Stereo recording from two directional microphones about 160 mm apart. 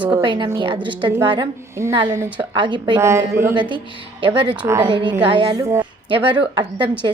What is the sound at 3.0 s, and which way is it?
Speech, 15° right (ahead or behind).